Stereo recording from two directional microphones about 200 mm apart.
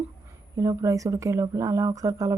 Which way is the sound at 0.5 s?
15° right (ahead or behind).